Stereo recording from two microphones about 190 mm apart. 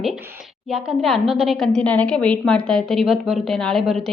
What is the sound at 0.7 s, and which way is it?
A woman's voice, centre (ahead or behind).